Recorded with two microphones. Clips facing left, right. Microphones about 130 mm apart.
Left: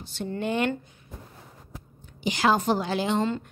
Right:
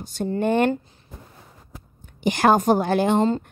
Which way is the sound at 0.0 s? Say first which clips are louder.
Right 7 dB; 45° right (ahead or behind).